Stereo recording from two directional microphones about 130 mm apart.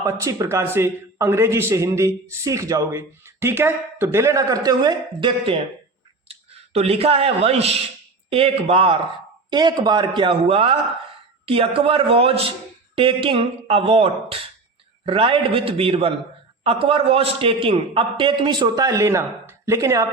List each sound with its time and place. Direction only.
0.0 s a man's voice: 20° right (ahead or behind)
6.2 s speech: 50° right (ahead or behind)
9.5 s a man's voice: 35° right (ahead or behind)
10.4 s a man's voice: 50° right (ahead or behind); by 20.1 s 25° right (ahead or behind)